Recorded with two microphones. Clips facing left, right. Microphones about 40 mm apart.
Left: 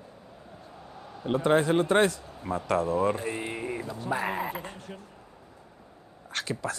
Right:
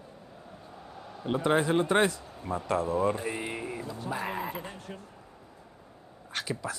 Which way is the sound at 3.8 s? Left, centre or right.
Left.